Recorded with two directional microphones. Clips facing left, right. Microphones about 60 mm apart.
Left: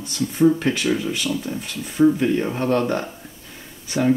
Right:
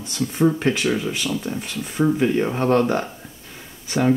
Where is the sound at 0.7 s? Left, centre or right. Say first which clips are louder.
Even; centre.